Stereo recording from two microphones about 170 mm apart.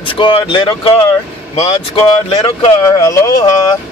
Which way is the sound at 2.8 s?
20° left (ahead or behind).